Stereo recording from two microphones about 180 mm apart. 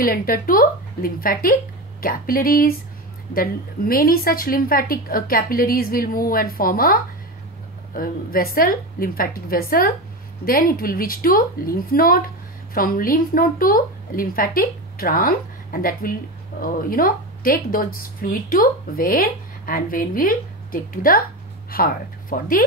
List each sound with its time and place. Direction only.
0.0 s a woman's voice: 55° left (ahead or behind)